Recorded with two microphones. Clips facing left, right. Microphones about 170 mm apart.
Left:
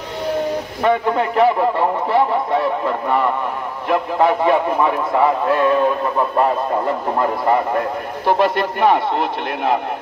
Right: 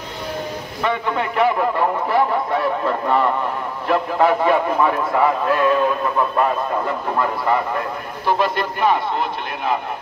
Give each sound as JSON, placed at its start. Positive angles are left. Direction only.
{"t": 0.8, "sound": "a man's voice", "side_deg": 40}
{"t": 8.3, "sound": "a man's voice", "side_deg": 65}